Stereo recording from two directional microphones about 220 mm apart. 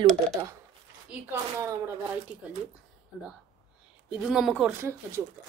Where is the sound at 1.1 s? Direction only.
10° right (ahead or behind).